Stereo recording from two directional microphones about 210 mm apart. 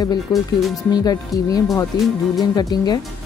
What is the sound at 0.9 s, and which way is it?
Speech, 20° left (ahead or behind).